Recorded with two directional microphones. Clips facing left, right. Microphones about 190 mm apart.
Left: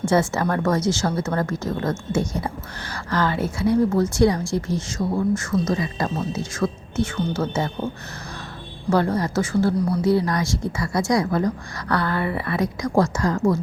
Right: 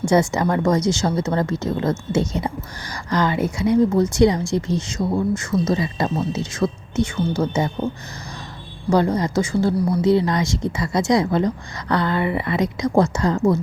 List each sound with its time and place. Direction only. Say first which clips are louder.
0.0 s speech: right 2 dB; 15° right (ahead or behind)
8.9 s a woman's voice: right 2 dB; 15° right (ahead or behind)